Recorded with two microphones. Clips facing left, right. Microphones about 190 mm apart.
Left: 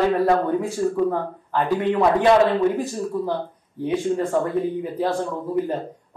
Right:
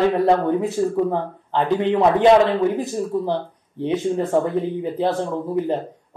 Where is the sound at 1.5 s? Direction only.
25° right (ahead or behind).